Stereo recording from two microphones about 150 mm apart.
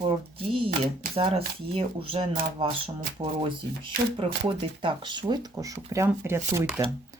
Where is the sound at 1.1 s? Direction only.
40° right (ahead or behind).